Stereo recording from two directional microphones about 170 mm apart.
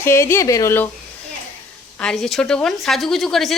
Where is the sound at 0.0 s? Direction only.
15° left (ahead or behind).